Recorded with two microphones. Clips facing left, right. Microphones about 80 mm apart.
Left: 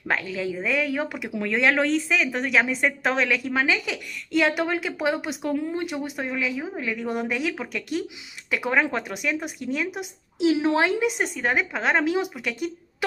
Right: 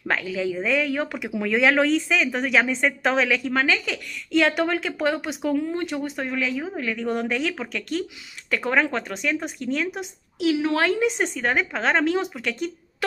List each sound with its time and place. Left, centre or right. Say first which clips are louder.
0.1 s a woman's voice: right 2 dB; centre
10.4 s speech: left 1 dB; left
11.0 s speech: right 2 dB; centre